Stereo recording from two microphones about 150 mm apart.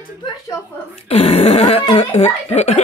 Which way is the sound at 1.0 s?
45° left (ahead or behind).